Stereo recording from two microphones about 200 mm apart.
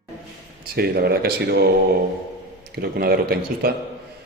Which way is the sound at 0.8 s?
50° right (ahead or behind).